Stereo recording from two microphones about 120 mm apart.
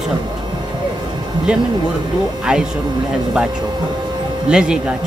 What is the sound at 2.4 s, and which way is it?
Speech, 5° right (ahead or behind).